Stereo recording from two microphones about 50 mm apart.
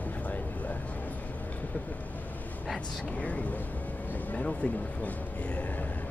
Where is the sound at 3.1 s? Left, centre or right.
Left.